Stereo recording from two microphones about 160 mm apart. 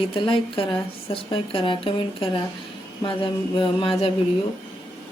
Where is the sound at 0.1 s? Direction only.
35° left (ahead or behind).